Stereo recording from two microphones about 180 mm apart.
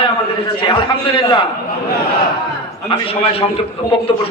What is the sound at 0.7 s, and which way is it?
Speech, 30° left (ahead or behind).